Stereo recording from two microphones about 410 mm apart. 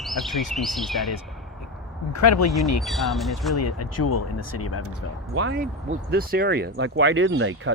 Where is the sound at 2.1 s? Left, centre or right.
Left.